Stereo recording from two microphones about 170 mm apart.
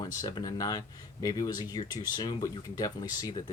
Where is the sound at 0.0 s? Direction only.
20° left (ahead or behind).